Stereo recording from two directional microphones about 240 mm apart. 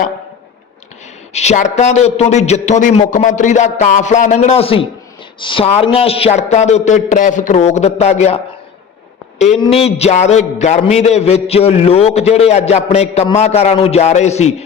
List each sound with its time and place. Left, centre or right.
1.3 s speech: left
9.4 s speech: left